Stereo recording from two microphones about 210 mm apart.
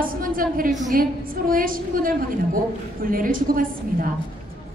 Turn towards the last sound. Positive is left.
turn(degrees=-40)  # may be behind; listen again after turning